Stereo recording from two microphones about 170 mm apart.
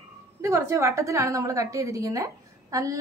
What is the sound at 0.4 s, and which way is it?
A woman's voice, 15° right (ahead or behind).